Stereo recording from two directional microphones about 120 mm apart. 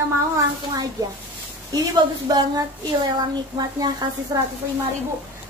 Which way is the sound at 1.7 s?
35° right (ahead or behind).